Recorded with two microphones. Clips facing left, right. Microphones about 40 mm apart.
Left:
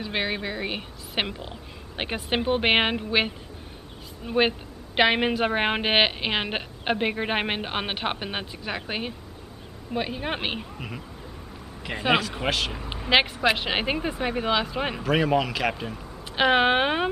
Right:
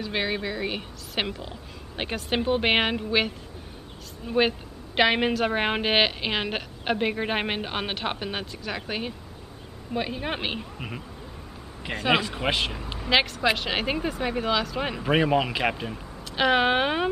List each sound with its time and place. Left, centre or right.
0.0 s a woman's voice: centre
11.9 s speech: centre
12.9 s a woman's voice: centre
15.0 s speech: centre
15.7 s speech: centre
16.3 s a woman's voice: centre